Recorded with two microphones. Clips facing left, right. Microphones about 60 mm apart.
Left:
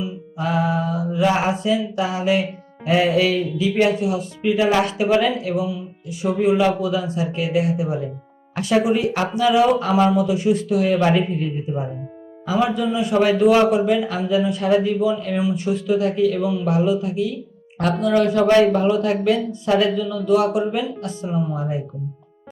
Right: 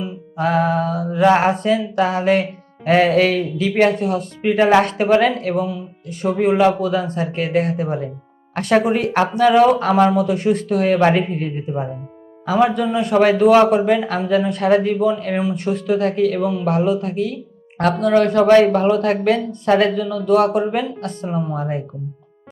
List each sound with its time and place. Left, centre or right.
0.0 s mantra: right
12.5 s mantra: right